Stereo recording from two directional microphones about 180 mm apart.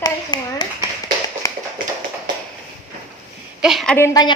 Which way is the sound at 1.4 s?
15° left (ahead or behind).